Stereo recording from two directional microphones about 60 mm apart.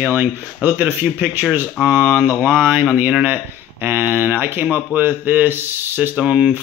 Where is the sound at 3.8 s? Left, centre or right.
Right.